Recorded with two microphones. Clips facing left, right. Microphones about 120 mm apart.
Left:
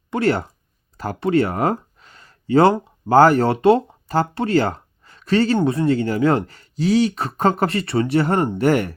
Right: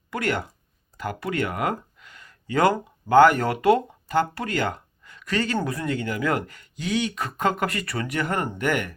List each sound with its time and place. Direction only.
0.1 s speech: 30° left (ahead or behind)